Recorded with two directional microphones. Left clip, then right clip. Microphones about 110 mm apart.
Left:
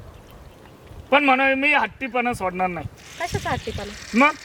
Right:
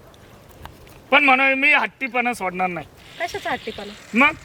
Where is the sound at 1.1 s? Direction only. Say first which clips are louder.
Right 2 dB; 5° right (ahead or behind).